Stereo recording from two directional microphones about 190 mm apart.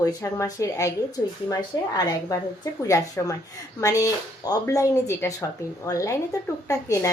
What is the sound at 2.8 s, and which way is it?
A woman's voice, 15° left (ahead or behind).